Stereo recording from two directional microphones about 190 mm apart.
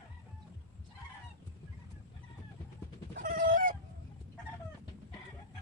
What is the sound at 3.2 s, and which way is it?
Fowl, 45° right (ahead or behind).